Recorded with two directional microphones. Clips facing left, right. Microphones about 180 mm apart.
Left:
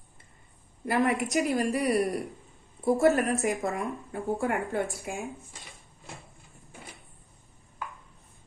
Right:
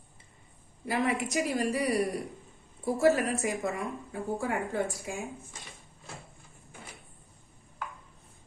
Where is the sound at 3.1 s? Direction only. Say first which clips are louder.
Left 1 dB; centre (ahead or behind).